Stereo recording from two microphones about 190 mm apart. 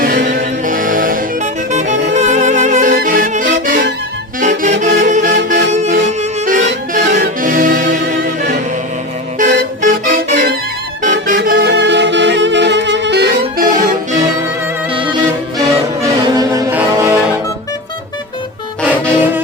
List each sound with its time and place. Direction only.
0.0 s music: 50° right (ahead or behind)
4.4 s saxophone: 40° right (ahead or behind)
6.1 s accordion: 45° right (ahead or behind)
6.9 s music: 45° right (ahead or behind)
9.4 s music: 45° right (ahead or behind)
11.4 s music: 60° right (ahead or behind); by 14.3 s 45° right (ahead or behind)
14.9 s music: 25° right (ahead or behind)
18.9 s music: 10° right (ahead or behind)